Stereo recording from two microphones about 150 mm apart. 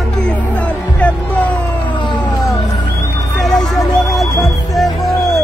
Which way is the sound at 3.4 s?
Centre (ahead or behind).